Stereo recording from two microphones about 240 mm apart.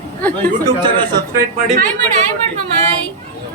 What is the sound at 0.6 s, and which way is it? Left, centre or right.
Speech, centre.